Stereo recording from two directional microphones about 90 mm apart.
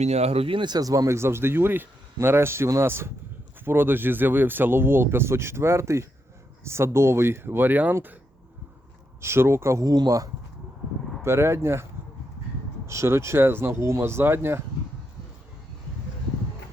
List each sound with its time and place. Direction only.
0.3 s speech: 80° right; by 8.1 s 20° right (ahead or behind)
9.2 s speech: 30° right (ahead or behind); by 10.2 s 45° right (ahead or behind)
11.2 s speech: 30° right (ahead or behind)